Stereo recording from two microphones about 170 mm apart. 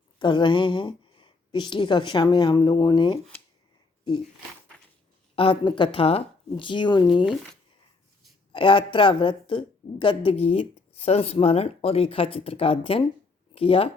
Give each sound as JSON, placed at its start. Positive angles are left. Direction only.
{"t": 0.2, "sound": "a woman's voice", "side_deg": 25}
{"t": 5.3, "sound": "a woman's voice", "side_deg": 30}
{"t": 8.5, "sound": "a woman's voice", "side_deg": 30}